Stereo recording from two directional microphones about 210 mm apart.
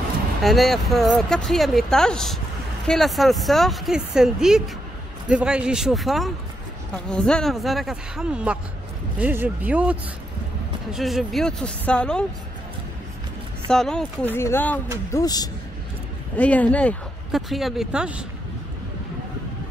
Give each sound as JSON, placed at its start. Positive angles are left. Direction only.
{"t": 0.4, "sound": "speech", "side_deg": 0}
{"t": 13.7, "sound": "speech", "side_deg": 0}
{"t": 16.3, "sound": "speech", "side_deg": 5}